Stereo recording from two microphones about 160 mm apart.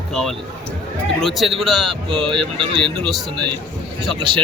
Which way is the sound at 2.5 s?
30° right (ahead or behind).